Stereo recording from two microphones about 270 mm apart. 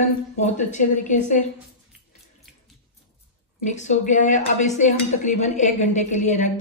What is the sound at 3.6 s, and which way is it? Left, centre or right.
Speech, left.